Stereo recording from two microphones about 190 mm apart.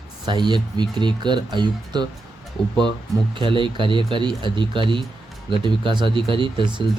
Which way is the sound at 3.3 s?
25° right (ahead or behind).